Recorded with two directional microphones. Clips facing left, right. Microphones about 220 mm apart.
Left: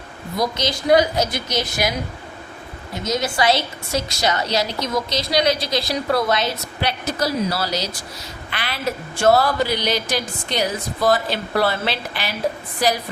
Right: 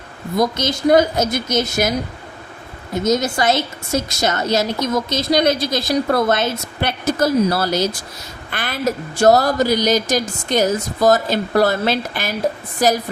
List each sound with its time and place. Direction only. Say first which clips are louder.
0.3 s a woman's voice: right 4 dB; 50° right (ahead or behind)
2.9 s a woman's voice: right 6 dB; 45° right (ahead or behind)